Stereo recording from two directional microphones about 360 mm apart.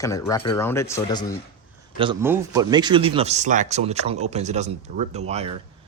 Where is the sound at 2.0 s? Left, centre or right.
Centre.